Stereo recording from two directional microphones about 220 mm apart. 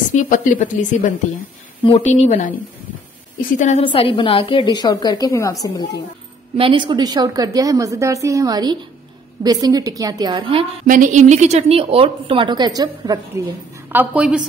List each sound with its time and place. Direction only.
0.1 s a woman's voice: 35° left (ahead or behind); by 5.9 s 15° left (ahead or behind)
6.5 s a woman's voice: 25° right (ahead or behind)
10.9 s a woman's voice: 35° right (ahead or behind); by 14.4 s 5° right (ahead or behind)